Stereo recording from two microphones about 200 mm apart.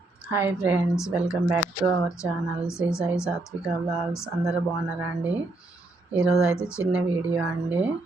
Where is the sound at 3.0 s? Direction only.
5° right (ahead or behind).